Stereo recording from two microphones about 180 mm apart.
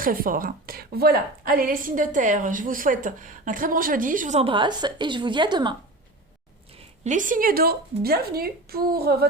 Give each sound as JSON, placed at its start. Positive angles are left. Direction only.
{"t": 0.0, "sound": "a woman's voice", "side_deg": -50}
{"t": 7.0, "sound": "speech", "side_deg": -45}